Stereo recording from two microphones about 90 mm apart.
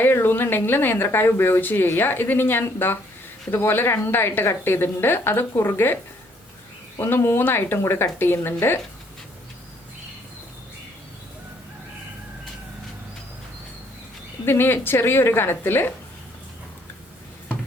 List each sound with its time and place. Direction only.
0.0 s speech: 25° left (ahead or behind)
7.0 s speech: 25° left (ahead or behind)
14.4 s speech: 25° left (ahead or behind)